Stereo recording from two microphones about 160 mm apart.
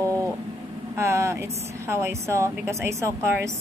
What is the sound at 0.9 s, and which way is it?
A woman's voice, 15° right (ahead or behind).